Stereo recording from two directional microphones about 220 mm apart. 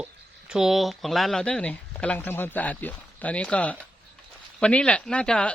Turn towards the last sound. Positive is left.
turn(degrees=5)  # may be behind; listen again after turning